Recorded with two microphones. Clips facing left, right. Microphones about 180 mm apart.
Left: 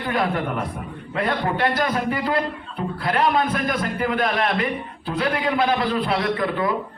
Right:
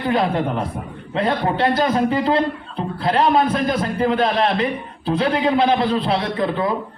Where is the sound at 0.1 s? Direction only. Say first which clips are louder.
Right 3 dB; 25° right (ahead or behind).